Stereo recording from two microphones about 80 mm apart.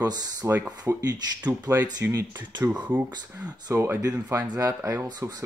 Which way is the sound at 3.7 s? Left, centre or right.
Right.